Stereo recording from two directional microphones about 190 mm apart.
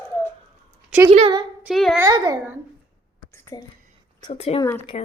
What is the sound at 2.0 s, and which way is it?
Speech, 20° right (ahead or behind).